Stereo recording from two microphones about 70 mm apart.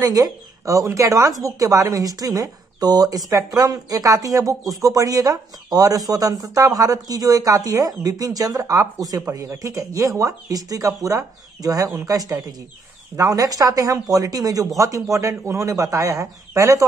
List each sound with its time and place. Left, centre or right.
0.0 s speech: right